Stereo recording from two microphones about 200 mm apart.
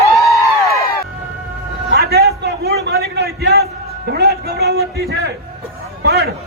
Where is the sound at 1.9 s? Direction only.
55° right (ahead or behind).